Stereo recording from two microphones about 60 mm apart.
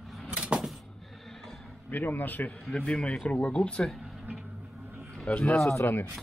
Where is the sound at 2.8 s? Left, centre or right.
Centre.